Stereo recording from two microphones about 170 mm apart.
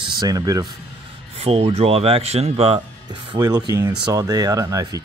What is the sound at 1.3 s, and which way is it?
Speech, 35° right (ahead or behind).